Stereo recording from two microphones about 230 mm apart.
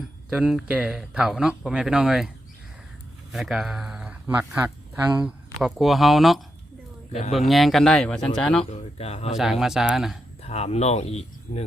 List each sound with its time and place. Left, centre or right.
0.3 s speech: centre
3.3 s speech: centre
7.1 s speech: left
7.3 s speech: centre
8.7 s speech: left
9.4 s speech: centre
10.4 s speech: left